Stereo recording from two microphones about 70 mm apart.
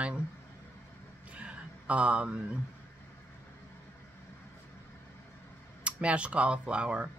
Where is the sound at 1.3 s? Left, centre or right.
Centre.